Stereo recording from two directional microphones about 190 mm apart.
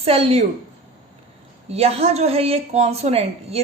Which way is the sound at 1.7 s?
35° right (ahead or behind).